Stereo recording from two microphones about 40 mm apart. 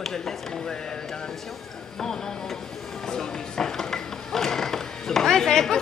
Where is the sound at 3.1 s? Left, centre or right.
Centre.